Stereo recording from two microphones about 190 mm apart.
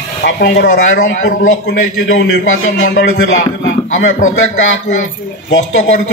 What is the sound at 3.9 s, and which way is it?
Speech, 90° left.